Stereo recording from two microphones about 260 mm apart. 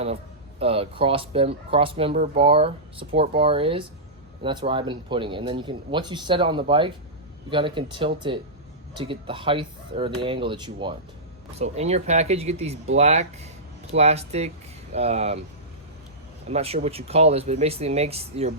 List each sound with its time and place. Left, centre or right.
0.6 s speech: right
16.5 s speech: right